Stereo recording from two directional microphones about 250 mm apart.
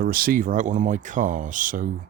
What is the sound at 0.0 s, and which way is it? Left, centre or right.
Speech, right.